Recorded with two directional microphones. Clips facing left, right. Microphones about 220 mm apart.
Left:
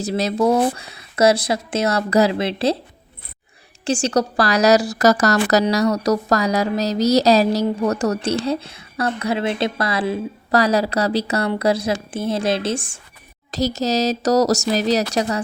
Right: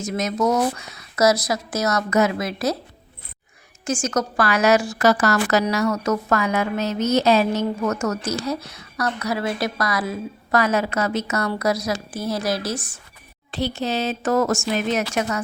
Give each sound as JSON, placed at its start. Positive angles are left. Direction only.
{"t": 0.0, "sound": "speech", "side_deg": 35}
{"t": 3.8, "sound": "a woman's voice", "side_deg": 30}
{"t": 13.5, "sound": "a woman's voice", "side_deg": 40}